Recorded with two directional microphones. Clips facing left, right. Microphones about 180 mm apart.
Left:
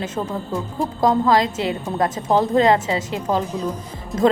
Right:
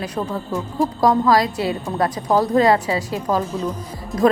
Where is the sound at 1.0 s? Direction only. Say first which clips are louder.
Even; 20° left (ahead or behind).